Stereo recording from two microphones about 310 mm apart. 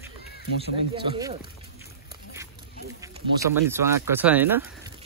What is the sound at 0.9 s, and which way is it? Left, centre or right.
Speech, centre.